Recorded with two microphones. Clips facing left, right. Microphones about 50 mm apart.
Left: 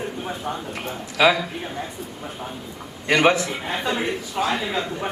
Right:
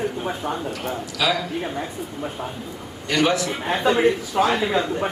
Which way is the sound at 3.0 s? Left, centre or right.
Left.